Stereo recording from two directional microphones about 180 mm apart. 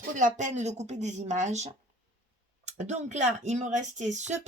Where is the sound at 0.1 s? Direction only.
45° right (ahead or behind).